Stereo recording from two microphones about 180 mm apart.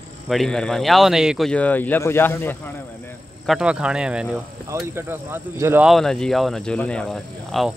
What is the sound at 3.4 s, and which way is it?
Speech, 5° right (ahead or behind).